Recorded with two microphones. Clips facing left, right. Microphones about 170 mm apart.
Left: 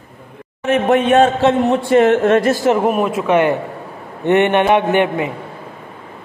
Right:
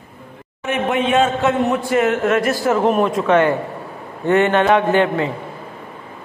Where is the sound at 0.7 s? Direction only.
40° left (ahead or behind); by 2.8 s 20° left (ahead or behind).